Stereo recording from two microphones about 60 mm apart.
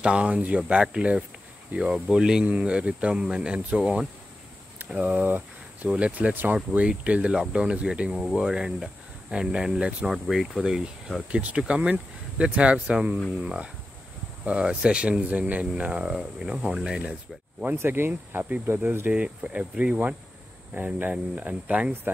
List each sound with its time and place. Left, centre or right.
0.0 s speech: centre
5.0 s speech: right
10.0 s speech: centre
11.2 s speech: centre
17.7 s speech: right
19.1 s speech: centre
20.7 s speech: right